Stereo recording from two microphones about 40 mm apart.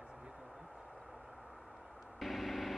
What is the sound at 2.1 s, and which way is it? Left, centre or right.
Vehicle, centre.